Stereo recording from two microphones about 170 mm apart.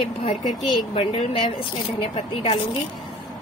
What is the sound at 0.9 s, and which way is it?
A woman's voice, 35° left (ahead or behind).